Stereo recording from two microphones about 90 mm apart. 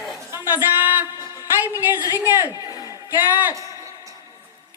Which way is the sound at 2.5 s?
45° left (ahead or behind).